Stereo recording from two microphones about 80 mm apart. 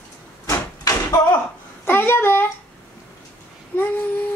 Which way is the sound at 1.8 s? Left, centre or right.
Left.